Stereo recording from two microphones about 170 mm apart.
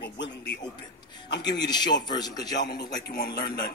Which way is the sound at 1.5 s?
25° left (ahead or behind).